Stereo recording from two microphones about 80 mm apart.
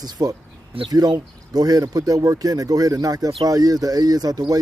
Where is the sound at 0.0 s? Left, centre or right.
Right.